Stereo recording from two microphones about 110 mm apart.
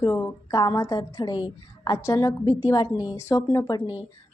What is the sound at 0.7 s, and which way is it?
Speech, 30° left (ahead or behind).